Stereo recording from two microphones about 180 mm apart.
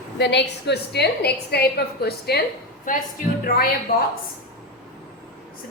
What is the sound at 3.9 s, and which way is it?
Speech, 55° left (ahead or behind).